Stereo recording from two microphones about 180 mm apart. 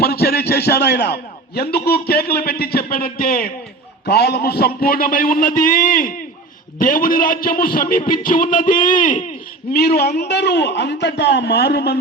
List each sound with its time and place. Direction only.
0.0 s a man's voice: 60° left (ahead or behind)
4.0 s a man's voice: 65° left (ahead or behind); by 9.2 s 45° left (ahead or behind)
9.7 s a man's voice: 60° left (ahead or behind)